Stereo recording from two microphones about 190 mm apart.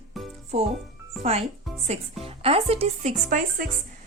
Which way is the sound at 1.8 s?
30° right (ahead or behind).